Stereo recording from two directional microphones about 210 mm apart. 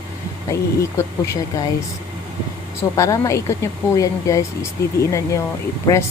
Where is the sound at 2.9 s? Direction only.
15° left (ahead or behind).